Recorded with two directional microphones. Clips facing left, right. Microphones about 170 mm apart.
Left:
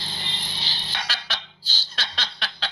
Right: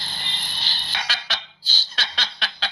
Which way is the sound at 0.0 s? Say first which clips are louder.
Left 1 dB; 55° right (ahead or behind).